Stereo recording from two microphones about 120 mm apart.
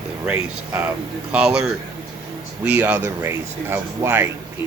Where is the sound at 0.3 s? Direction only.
10° right (ahead or behind).